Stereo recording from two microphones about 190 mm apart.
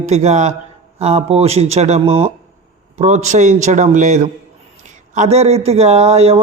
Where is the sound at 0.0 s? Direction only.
35° right (ahead or behind).